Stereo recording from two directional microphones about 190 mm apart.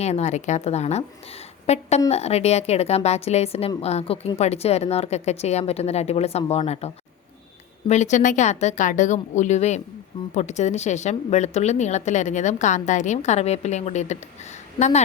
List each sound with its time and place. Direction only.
0.0 s a woman's voice: 35° left (ahead or behind)